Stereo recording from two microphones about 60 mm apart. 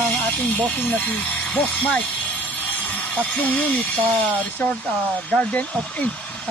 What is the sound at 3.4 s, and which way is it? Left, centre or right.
Speech, left.